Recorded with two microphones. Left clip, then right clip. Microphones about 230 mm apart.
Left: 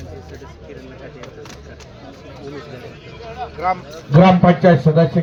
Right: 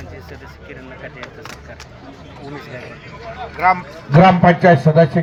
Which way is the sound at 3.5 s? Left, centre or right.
Right.